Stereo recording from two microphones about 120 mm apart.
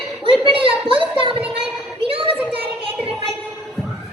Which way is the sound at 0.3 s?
50° right (ahead or behind).